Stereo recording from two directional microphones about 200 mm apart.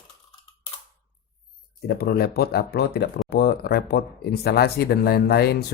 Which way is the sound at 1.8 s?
50° left (ahead or behind).